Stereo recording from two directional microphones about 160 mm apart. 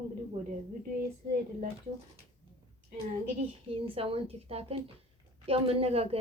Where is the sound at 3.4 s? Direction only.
35° right (ahead or behind).